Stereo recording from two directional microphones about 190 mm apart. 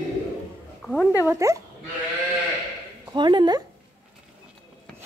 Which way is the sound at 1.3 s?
15° right (ahead or behind).